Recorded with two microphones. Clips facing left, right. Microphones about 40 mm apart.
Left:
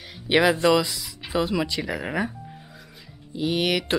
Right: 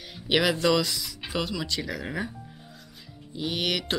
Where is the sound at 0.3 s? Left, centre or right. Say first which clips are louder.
Left 4 dB; centre.